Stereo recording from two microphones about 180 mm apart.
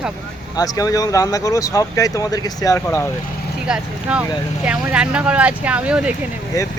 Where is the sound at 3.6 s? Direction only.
5° right (ahead or behind).